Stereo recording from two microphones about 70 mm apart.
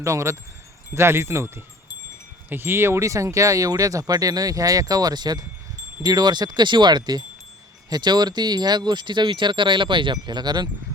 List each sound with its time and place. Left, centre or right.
0.0 s wind chime: right
0.9 s speech: right